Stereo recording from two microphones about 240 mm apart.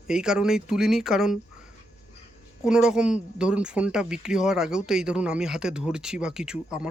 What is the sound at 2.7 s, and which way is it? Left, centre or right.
Speech, centre.